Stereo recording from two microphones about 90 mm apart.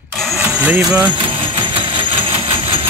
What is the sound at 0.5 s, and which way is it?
Speech, 15° right (ahead or behind).